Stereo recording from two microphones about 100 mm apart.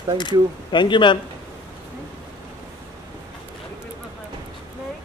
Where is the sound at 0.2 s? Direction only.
50° left (ahead or behind).